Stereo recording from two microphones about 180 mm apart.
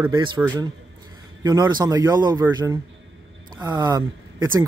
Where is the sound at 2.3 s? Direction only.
10° right (ahead or behind).